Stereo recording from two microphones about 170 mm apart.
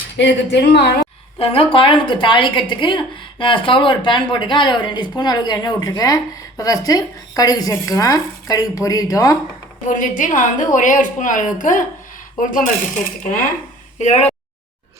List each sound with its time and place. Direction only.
0.2 s a woman's voice: 85° left
1.4 s a woman's voice: 30° left (ahead or behind)
9.8 s a woman's voice: 50° left (ahead or behind)
14.0 s speech: 40° left (ahead or behind)